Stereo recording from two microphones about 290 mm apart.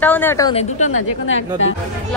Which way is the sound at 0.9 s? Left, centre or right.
Left.